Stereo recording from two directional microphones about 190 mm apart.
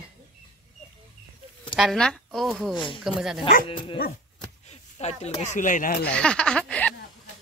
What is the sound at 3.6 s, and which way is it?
Dog, 25° left (ahead or behind).